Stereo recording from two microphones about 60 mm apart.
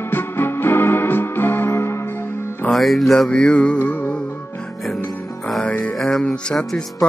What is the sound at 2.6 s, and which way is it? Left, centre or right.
Music, centre.